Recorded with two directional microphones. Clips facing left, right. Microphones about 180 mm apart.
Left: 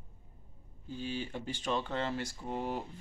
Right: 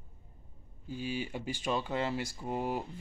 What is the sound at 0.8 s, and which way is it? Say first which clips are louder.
Speech: right 2 dB; 10° right (ahead or behind).